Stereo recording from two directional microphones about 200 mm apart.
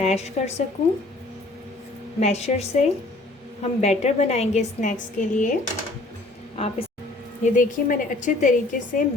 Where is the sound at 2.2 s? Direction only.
35° left (ahead or behind).